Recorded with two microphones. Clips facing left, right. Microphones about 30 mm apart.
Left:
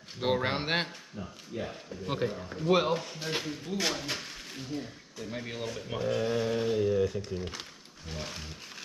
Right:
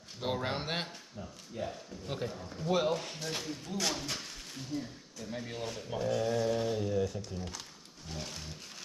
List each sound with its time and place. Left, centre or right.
0.2 s speech: left
7.2 s speech: left
8.1 s speech: centre